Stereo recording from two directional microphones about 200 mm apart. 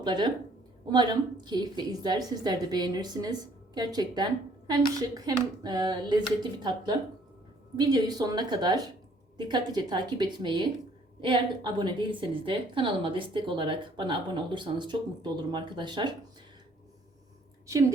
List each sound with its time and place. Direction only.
0.0 s a woman's voice: 20° right (ahead or behind)